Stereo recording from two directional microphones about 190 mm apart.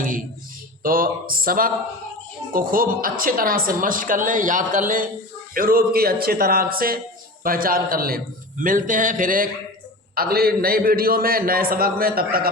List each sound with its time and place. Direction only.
0.8 s a woman's voice: 50° right (ahead or behind)